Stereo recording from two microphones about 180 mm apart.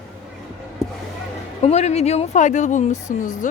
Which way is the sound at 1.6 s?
35° left (ahead or behind).